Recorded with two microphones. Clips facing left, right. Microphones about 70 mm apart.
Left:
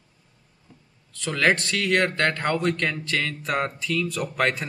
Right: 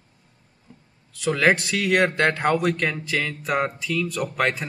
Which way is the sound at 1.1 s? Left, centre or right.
Centre.